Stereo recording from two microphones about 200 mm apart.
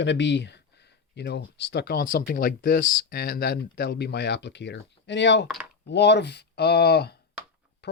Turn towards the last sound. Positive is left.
turn(degrees=55)  # may be behind; listen again after turning